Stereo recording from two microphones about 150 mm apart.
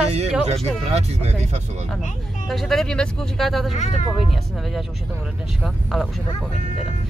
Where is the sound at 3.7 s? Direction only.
50° left (ahead or behind).